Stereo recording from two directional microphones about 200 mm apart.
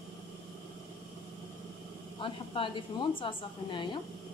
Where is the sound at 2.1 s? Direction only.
25° left (ahead or behind).